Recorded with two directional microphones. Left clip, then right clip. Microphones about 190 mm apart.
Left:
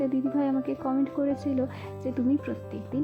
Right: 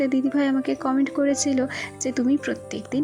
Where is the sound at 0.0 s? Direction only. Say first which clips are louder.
Right 5 dB; 15° right (ahead or behind).